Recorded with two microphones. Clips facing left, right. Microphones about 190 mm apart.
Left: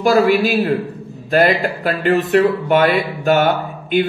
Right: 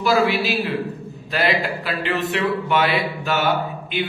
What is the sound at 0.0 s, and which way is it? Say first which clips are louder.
A man's voice: left 6 dB; 50° left (ahead or behind).